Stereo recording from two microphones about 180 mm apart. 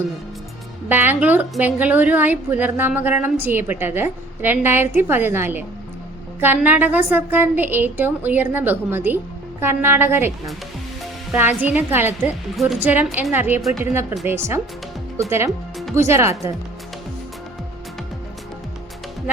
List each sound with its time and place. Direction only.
0.9 s a woman's voice: 10° right (ahead or behind)